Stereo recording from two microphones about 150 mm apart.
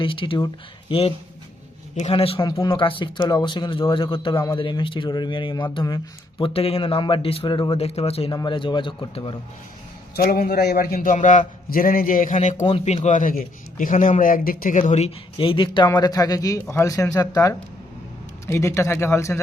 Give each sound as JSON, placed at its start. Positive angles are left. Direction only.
{"t": 0.0, "sound": "speech", "side_deg": 35}
{"t": 2.5, "sound": "speech", "side_deg": 25}
{"t": 6.4, "sound": "speech", "side_deg": 40}
{"t": 8.3, "sound": "speech", "side_deg": 30}
{"t": 10.2, "sound": "a man's voice", "side_deg": 80}
{"t": 15.9, "sound": "a man's voice", "side_deg": 25}